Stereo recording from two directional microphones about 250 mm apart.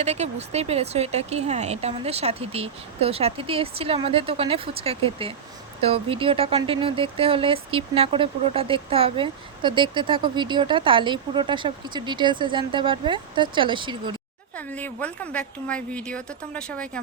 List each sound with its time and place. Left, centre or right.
0.0 s speech: right
14.5 s a woman's voice: centre